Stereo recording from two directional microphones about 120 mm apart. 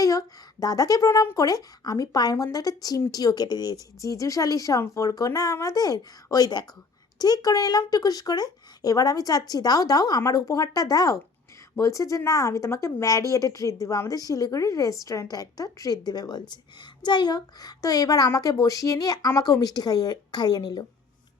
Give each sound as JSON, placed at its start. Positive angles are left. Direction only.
{"t": 0.0, "sound": "a woman's voice", "side_deg": 30}